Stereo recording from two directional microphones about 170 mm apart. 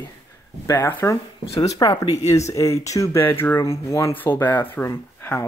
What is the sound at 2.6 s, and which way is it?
Speech, 15° left (ahead or behind).